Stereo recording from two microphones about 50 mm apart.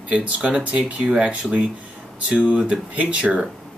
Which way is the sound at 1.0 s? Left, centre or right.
Centre.